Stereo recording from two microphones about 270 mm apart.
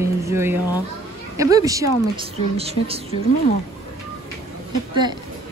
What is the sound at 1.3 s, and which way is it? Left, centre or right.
Speech, centre.